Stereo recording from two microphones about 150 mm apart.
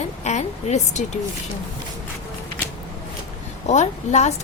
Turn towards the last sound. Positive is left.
turn(degrees=50)  # may be behind; listen again after turning